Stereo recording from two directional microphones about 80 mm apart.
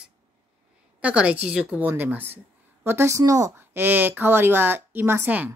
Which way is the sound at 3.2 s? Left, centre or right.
Right.